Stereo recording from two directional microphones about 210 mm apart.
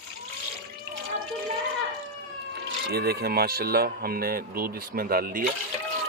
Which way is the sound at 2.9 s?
50° right (ahead or behind).